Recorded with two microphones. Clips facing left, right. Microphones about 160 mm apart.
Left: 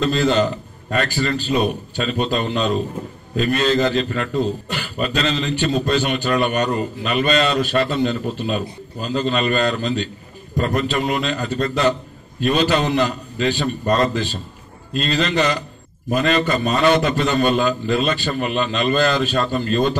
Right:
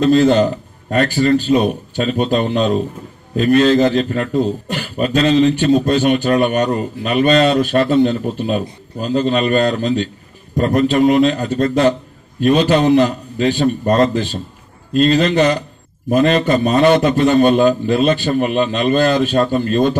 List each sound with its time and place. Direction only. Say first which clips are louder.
0.0 s a man's voice: right 6 dB; 45° right (ahead or behind)